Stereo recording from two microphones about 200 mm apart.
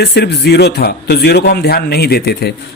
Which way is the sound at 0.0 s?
55° left (ahead or behind).